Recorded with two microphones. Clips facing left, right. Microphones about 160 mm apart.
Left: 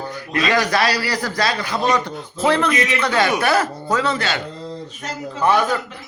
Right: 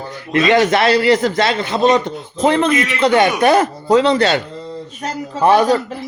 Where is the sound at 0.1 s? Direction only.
25° right (ahead or behind).